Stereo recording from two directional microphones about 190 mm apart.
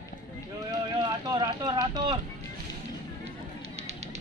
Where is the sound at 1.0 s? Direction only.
20° right (ahead or behind).